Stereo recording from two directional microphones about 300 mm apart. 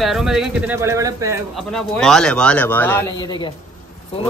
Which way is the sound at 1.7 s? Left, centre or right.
Centre.